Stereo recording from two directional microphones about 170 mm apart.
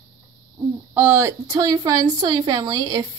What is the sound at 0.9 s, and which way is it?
A woman's voice, 10° right (ahead or behind).